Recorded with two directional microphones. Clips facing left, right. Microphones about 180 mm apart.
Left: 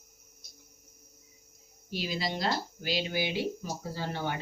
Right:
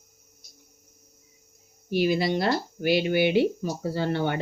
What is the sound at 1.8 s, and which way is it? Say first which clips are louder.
Speech: right 11 dB; 60° right (ahead or behind).